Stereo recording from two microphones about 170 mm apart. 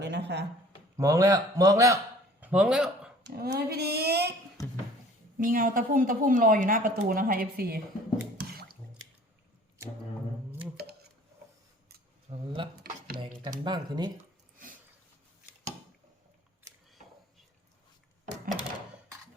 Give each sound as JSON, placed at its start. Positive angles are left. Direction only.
{"t": 0.0, "sound": "speech", "side_deg": -80}
{"t": 0.9, "sound": "a man's voice", "side_deg": -20}
{"t": 2.4, "sound": "a man's voice", "side_deg": -5}
{"t": 3.2, "sound": "speech", "side_deg": -75}
{"t": 4.6, "sound": "music", "side_deg": 20}
{"t": 5.4, "sound": "a woman's voice", "side_deg": -55}
{"t": 8.4, "sound": "drip", "side_deg": -65}
{"t": 12.3, "sound": "a sound", "side_deg": -35}
{"t": 12.8, "sound": "a sound", "side_deg": -60}
{"t": 13.7, "sound": "a man's voice", "side_deg": -25}